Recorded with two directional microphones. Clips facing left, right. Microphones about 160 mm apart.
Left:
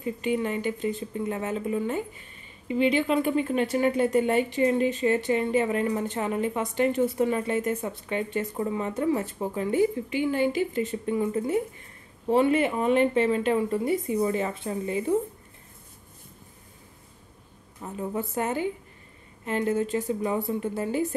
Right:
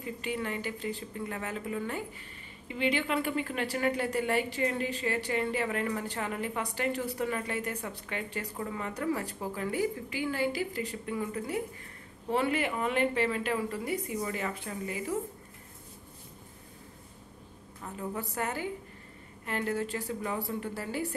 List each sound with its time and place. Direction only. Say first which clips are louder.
0.0 s speech: left 8 dB; 20° left (ahead or behind)
17.8 s speech: left 6 dB; 20° left (ahead or behind)